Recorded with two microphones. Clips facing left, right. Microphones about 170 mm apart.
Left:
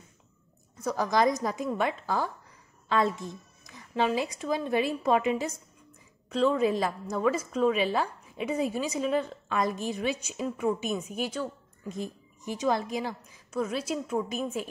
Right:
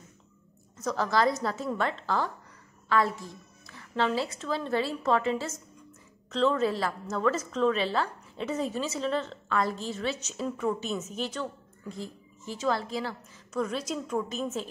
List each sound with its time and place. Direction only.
0.7 s a woman's voice: 10° left (ahead or behind)
2.9 s a woman's voice: 20° left (ahead or behind)